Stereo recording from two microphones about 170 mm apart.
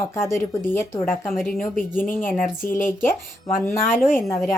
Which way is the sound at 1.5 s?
55° left (ahead or behind).